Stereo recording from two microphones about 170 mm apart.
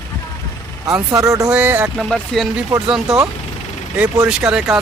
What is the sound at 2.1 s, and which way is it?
Speech, centre (ahead or behind).